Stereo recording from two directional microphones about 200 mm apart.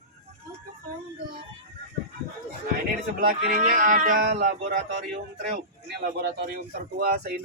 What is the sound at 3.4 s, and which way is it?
Speech, 40° right (ahead or behind).